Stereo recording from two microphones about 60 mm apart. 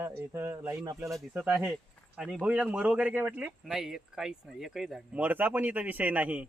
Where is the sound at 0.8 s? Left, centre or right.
Right.